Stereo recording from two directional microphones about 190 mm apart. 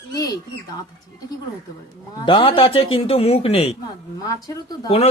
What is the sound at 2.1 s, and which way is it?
A man's voice, 25° left (ahead or behind).